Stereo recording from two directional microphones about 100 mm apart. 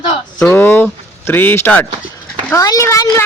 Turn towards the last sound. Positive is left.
turn(degrees=30)  # may be behind; listen again after turning